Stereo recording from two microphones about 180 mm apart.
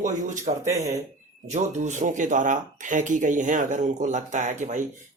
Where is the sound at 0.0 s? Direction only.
45° right (ahead or behind).